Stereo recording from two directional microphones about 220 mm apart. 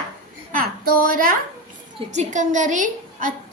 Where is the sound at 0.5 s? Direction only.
40° right (ahead or behind).